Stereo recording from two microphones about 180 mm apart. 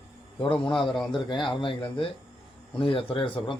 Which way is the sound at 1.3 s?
30° left (ahead or behind).